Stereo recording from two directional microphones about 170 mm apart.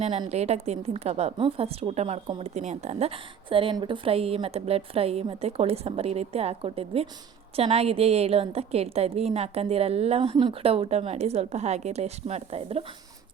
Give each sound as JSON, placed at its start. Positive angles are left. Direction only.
{"t": 0.0, "sound": "a woman's voice", "side_deg": -40}